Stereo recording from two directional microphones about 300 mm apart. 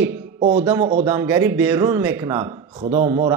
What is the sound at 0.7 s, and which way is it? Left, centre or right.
A man's voice, centre.